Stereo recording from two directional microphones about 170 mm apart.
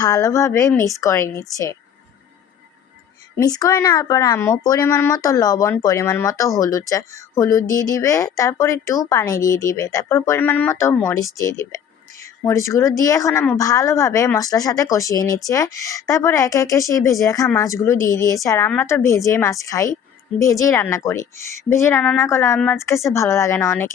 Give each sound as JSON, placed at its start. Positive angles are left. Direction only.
{"t": 0.0, "sound": "speech", "side_deg": 20}
{"t": 3.3, "sound": "speech", "side_deg": 20}